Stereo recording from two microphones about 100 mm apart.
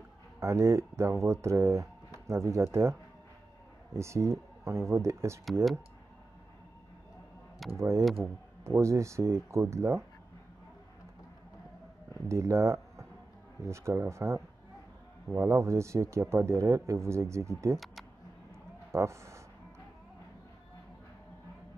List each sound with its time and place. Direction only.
0.4 s speech: 30° right (ahead or behind)
7.7 s speech: 30° right (ahead or behind)
12.3 s speech: 30° right (ahead or behind)
17.7 s speech: centre (ahead or behind)
18.5 s a sound: 30° right (ahead or behind)